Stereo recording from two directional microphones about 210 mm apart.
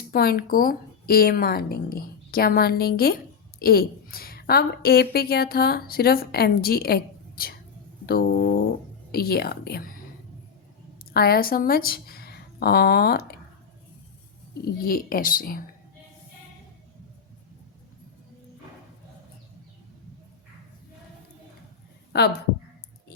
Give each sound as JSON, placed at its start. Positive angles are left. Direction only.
{"t": 0.1, "sound": "a woman's voice", "side_deg": 45}
{"t": 11.1, "sound": "speech", "side_deg": 45}
{"t": 14.6, "sound": "a woman's voice", "side_deg": 45}